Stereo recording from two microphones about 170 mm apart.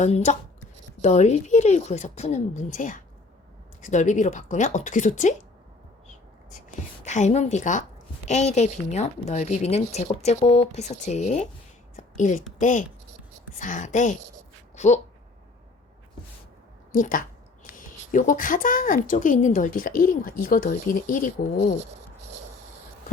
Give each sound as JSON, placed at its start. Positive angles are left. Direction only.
{"t": 0.0, "sound": "a woman's voice", "side_deg": 45}
{"t": 7.0, "sound": "a woman's voice", "side_deg": 45}
{"t": 11.9, "sound": "a sound", "side_deg": 45}
{"t": 12.5, "sound": "a woman's voice", "side_deg": 50}
{"t": 16.9, "sound": "a sound", "side_deg": 50}
{"t": 17.7, "sound": "a woman's voice", "side_deg": 50}